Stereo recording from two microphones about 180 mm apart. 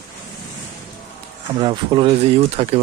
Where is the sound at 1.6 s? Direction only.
25° right (ahead or behind).